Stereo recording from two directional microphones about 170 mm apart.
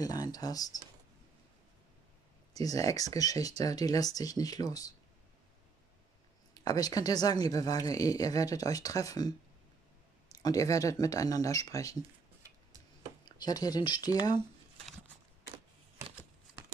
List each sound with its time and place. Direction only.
0.0 s speech: 20° left (ahead or behind)
2.5 s speech: 20° left (ahead or behind)
6.5 s speech: 20° left (ahead or behind)
13.4 s speech: 20° left (ahead or behind)